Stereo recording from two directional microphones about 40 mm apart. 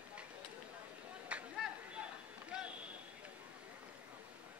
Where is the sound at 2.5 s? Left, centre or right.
Right.